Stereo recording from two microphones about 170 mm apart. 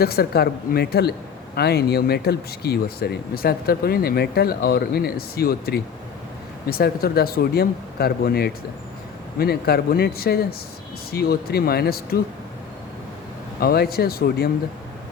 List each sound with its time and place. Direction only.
0.0 s a woman's voice: 65° left (ahead or behind)
13.6 s speech: 65° left (ahead or behind)